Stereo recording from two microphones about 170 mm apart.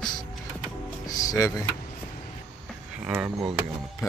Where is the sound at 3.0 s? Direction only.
10° right (ahead or behind).